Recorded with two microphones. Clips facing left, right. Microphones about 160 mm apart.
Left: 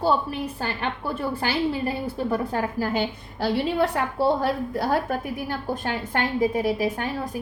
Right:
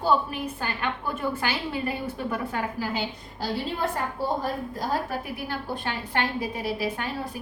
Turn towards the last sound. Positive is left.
turn(degrees=45)  # may be behind; listen again after turning